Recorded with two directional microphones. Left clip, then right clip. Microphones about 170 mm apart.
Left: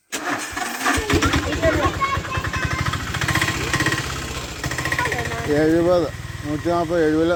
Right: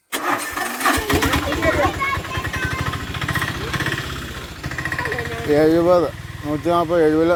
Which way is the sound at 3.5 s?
5° left (ahead or behind).